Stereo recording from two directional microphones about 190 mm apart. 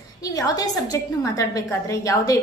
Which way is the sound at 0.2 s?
20° left (ahead or behind).